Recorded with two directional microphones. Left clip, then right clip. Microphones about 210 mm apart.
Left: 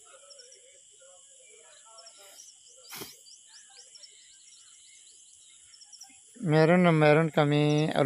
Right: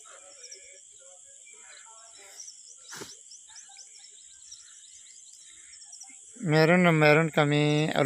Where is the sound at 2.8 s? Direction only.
25° left (ahead or behind).